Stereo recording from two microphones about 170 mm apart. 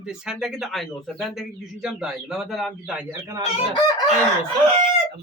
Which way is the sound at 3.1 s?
15° right (ahead or behind).